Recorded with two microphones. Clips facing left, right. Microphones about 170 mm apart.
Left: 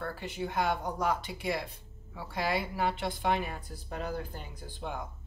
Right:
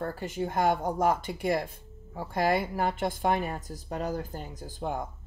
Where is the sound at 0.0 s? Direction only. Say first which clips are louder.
Right 4 dB; 45° right (ahead or behind).